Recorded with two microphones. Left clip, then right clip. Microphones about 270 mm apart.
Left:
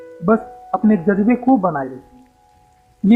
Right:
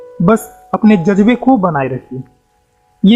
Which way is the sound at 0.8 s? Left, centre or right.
Right.